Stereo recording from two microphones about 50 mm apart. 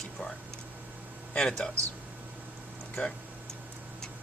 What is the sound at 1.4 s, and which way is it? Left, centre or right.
Speech, centre.